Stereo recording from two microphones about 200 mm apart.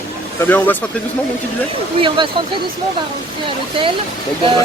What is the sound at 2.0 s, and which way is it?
Speech, 25° right (ahead or behind).